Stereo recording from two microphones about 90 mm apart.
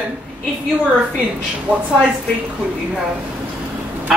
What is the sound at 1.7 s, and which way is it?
Speech, 15° right (ahead or behind).